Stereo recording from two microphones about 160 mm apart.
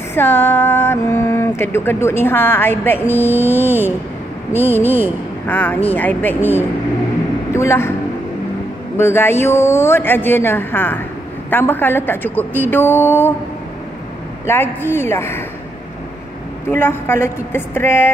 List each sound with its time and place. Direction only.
0.1 s speech: 15° left (ahead or behind)
5.5 s speech: 10° left (ahead or behind)
8.9 s speech: 15° left (ahead or behind)
14.4 s speech: 15° left (ahead or behind)
16.6 s speech: 15° left (ahead or behind)